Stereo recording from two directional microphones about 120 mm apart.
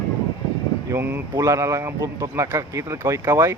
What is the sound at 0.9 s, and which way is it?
Speech, 20° right (ahead or behind).